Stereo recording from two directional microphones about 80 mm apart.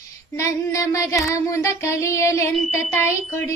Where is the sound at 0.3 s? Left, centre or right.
Left.